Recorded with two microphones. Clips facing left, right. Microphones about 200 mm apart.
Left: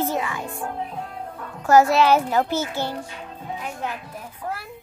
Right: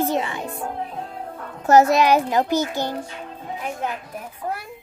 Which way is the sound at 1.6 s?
20° right (ahead or behind).